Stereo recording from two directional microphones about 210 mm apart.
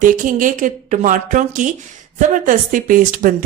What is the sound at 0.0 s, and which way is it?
Speech, 40° right (ahead or behind).